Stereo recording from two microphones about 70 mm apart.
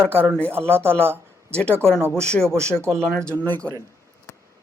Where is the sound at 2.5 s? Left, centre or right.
Right.